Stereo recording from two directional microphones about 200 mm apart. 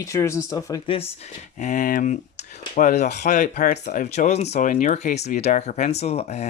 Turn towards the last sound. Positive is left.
turn(degrees=30)  # may be behind; listen again after turning